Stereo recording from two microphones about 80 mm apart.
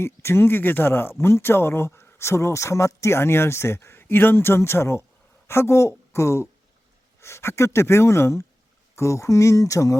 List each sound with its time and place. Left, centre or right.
0.0 s speech: left